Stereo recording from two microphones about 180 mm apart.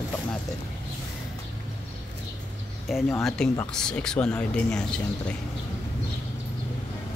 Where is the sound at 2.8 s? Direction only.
Centre (ahead or behind).